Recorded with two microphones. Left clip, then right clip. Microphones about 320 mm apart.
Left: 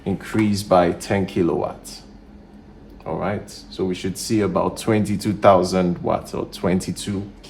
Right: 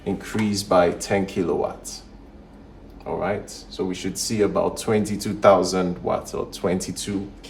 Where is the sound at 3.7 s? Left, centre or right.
Left.